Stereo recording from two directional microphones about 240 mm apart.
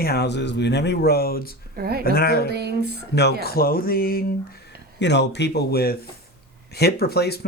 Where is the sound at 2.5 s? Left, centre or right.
Right.